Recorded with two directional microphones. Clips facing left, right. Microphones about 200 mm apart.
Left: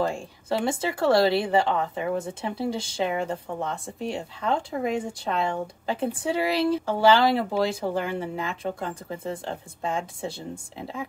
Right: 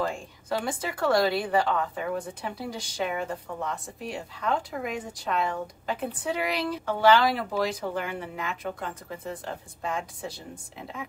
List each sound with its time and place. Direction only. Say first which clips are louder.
0.0 s speech: left 3 dB; 25° left (ahead or behind)